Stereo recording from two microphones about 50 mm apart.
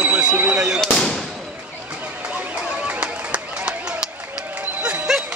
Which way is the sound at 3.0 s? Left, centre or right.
Right.